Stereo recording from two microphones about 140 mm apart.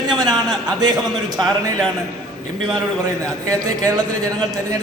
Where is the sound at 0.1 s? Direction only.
30° right (ahead or behind).